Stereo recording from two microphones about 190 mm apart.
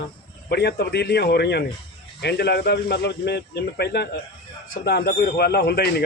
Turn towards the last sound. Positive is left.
turn(degrees=55)  # may be behind; listen again after turning